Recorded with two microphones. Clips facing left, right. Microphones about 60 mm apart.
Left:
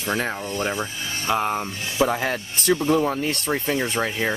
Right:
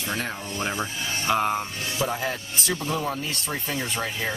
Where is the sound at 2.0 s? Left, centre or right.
Left.